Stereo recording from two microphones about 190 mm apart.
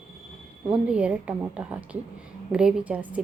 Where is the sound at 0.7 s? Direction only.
5° right (ahead or behind).